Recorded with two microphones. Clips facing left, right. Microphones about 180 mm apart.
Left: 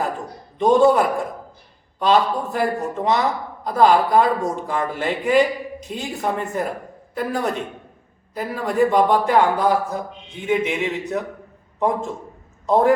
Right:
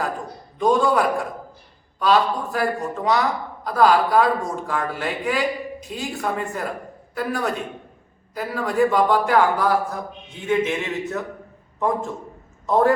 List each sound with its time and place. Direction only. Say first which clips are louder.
0.6 s a man's voice: left 4 dB; 20° left (ahead or behind)